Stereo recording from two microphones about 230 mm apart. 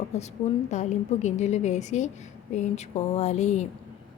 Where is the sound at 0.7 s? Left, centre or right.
Left.